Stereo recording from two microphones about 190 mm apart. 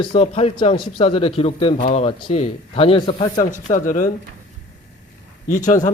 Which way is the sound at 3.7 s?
40° left (ahead or behind).